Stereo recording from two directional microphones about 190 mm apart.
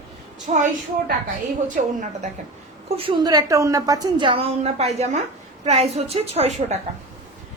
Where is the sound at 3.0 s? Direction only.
25° right (ahead or behind).